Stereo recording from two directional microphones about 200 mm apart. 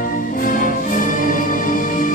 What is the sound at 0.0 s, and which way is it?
Music, 45° left (ahead or behind).